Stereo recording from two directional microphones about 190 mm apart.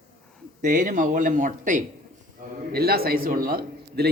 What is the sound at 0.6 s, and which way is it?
A man's voice, 40° right (ahead or behind).